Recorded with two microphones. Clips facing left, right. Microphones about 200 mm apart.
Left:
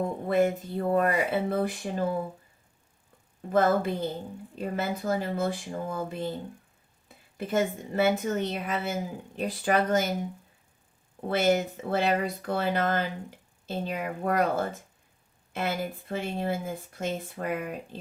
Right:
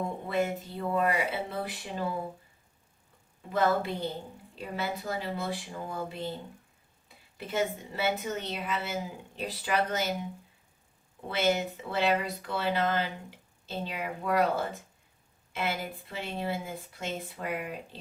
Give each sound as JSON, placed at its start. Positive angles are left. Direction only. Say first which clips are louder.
{"t": 0.3, "sound": "a woman's voice", "louder": "left 7 dB", "side_deg": 50}
{"t": 3.5, "sound": "a woman's voice", "louder": "left 4 dB", "side_deg": 45}
{"t": 7.3, "sound": "a woman's voice", "louder": "left 4 dB", "side_deg": 50}
{"t": 11.3, "sound": "a woman's voice", "louder": "left 4 dB", "side_deg": 50}